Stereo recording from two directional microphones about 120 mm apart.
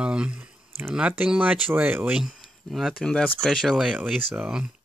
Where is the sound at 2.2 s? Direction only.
Centre (ahead or behind).